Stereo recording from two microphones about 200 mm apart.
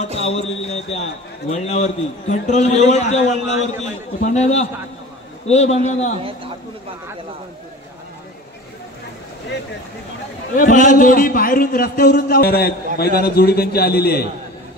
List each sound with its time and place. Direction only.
0.2 s a man's voice: 30° left (ahead or behind)
10.5 s a man's voice: 40° left (ahead or behind)